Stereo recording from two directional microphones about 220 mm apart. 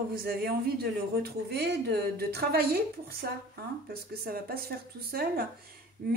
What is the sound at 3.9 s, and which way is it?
A woman's voice, 45° right (ahead or behind).